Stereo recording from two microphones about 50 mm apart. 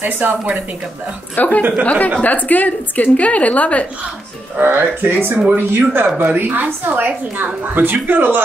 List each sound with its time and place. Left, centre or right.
0.0 s a woman's voice: right
1.3 s a woman's voice: left
4.6 s speech: right
5.1 s a woman's voice: right